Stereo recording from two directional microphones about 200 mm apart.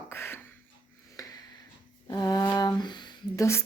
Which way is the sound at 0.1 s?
10° left (ahead or behind).